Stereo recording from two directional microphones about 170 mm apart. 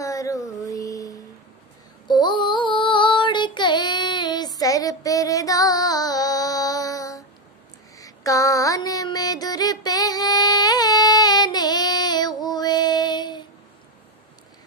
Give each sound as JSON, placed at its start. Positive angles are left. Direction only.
{"t": 0.0, "sound": "child singing", "side_deg": 20}
{"t": 2.0, "sound": "female singing", "side_deg": 25}
{"t": 8.0, "sound": "music", "side_deg": 20}